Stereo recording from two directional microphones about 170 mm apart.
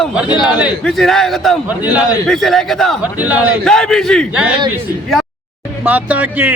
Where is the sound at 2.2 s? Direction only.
Centre (ahead or behind).